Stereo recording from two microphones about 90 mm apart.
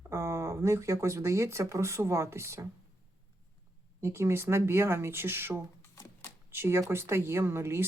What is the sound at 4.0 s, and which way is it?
Speech, 30° right (ahead or behind).